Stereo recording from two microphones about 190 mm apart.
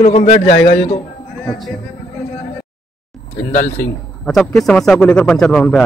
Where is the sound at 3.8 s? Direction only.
5° left (ahead or behind).